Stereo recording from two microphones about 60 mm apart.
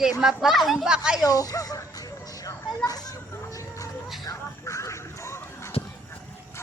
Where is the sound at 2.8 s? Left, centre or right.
Left.